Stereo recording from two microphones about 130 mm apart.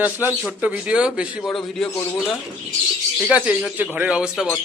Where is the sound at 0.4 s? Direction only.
10° right (ahead or behind).